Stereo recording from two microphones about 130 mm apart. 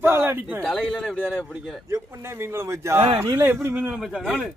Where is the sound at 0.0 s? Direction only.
15° right (ahead or behind).